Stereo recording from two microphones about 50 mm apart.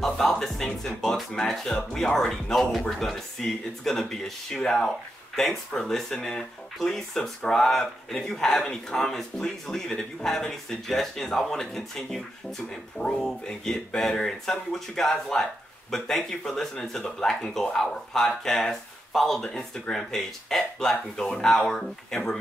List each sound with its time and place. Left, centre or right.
0.0 s speech: centre
12.9 s speech: centre